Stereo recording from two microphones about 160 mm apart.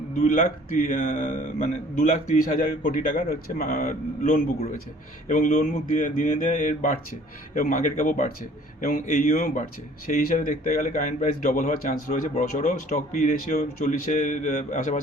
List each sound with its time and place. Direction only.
0.2 s a man's voice: 55° left (ahead or behind)